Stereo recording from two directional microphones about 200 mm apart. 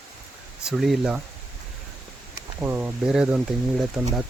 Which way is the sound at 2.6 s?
10° right (ahead or behind).